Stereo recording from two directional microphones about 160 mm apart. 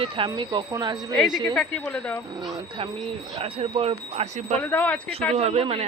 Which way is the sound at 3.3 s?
40° right (ahead or behind).